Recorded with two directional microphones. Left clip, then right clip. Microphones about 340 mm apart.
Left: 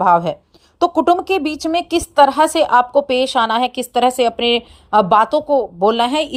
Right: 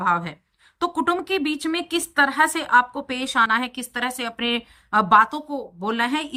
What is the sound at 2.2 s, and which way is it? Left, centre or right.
A woman's voice, centre.